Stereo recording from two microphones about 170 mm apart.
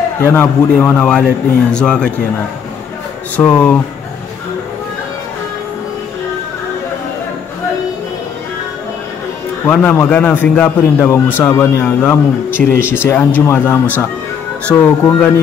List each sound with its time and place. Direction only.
0.2 s a man's voice: 15° left (ahead or behind)
3.3 s a man's voice: 10° left (ahead or behind)
9.7 s a man's voice: 10° left (ahead or behind)